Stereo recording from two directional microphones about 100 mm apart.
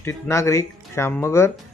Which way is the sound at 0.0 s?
30° left (ahead or behind).